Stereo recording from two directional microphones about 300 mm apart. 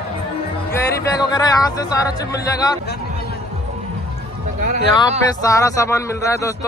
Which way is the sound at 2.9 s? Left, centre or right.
Left.